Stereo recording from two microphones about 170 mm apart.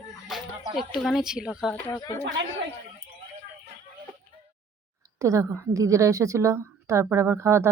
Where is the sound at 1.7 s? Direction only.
15° left (ahead or behind).